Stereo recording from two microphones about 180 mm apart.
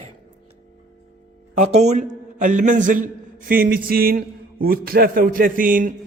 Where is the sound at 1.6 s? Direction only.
40° right (ahead or behind).